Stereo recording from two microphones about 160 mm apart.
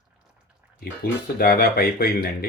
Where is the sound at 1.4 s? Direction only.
70° left (ahead or behind).